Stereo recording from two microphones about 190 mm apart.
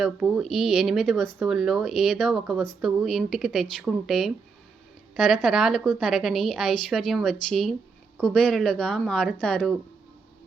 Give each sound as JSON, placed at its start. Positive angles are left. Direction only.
{"t": 0.0, "sound": "speech", "side_deg": 0}